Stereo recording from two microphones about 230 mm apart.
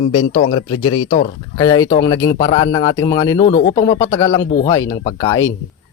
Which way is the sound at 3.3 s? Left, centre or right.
Left.